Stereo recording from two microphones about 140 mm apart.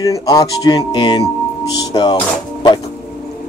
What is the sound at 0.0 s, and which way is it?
Speech, 25° left (ahead or behind).